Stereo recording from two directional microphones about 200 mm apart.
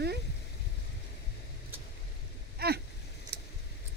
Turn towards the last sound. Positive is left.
turn(degrees=-55)  # may be behind; listen again after turning